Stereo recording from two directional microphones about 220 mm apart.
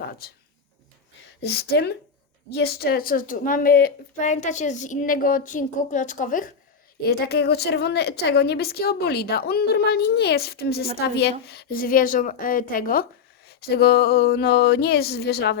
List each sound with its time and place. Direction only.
1.4 s a woman's voice: 50° left (ahead or behind)